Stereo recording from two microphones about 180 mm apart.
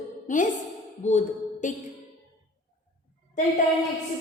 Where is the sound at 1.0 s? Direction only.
40° left (ahead or behind).